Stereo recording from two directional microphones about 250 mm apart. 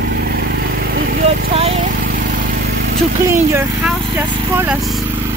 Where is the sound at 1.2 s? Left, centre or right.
Right.